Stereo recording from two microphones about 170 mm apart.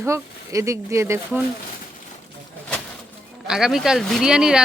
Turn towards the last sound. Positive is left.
turn(degrees=-5)  # may be behind; listen again after turning